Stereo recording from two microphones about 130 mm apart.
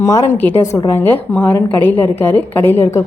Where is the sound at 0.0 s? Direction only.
25° left (ahead or behind).